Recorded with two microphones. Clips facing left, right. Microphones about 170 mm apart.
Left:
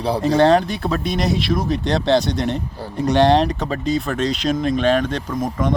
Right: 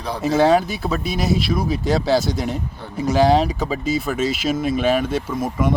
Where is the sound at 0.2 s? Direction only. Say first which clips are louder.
Even; 5° right (ahead or behind).